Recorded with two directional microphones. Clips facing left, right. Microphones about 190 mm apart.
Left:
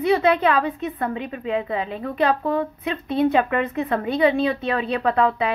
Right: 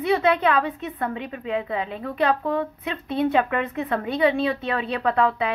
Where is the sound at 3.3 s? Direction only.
40° left (ahead or behind).